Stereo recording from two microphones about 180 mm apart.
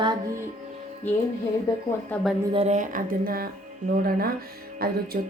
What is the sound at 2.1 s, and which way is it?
Speech, centre (ahead or behind).